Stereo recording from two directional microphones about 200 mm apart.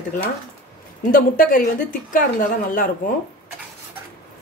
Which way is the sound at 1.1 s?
45° left (ahead or behind).